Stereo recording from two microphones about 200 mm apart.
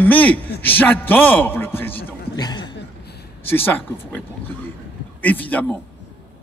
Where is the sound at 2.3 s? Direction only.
20° left (ahead or behind).